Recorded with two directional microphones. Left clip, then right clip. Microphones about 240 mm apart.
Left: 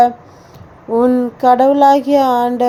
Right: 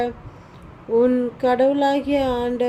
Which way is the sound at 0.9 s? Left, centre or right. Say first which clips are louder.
Left 4 dB; centre.